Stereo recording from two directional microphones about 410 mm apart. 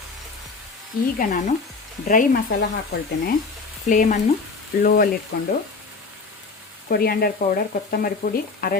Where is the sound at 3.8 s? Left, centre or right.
Centre.